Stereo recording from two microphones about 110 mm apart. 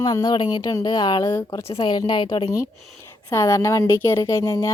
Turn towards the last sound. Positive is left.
turn(degrees=30)  # may be behind; listen again after turning